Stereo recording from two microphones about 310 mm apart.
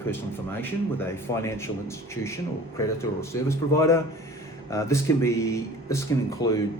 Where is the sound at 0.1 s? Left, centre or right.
Centre.